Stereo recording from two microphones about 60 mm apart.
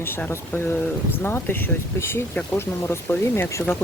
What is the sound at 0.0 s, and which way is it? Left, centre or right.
Speech, left.